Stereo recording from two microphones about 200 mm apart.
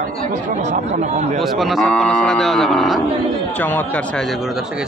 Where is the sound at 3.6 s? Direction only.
10° left (ahead or behind).